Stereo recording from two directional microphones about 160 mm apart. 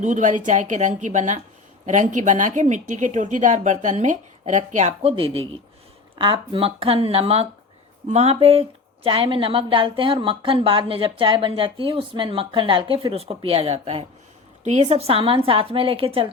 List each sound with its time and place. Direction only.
0.0 s speech: 50° right (ahead or behind)